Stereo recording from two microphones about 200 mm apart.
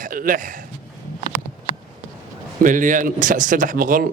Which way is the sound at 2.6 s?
40° right (ahead or behind).